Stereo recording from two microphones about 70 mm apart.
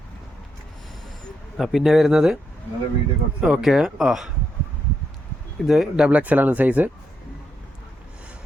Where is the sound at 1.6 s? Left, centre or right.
Centre.